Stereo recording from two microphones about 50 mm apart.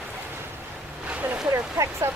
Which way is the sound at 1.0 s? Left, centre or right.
Right.